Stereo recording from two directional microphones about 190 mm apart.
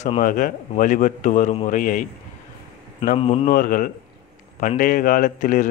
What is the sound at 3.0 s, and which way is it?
Speech, 35° left (ahead or behind).